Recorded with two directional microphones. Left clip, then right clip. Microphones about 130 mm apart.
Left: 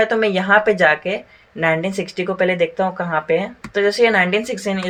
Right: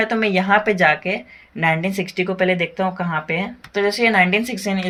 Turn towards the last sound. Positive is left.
turn(degrees=-40)  # may be behind; listen again after turning